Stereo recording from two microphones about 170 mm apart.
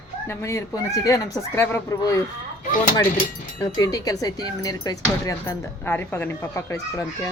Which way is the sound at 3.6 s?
20° left (ahead or behind).